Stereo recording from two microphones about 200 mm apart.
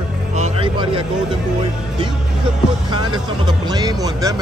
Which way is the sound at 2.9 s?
20° right (ahead or behind).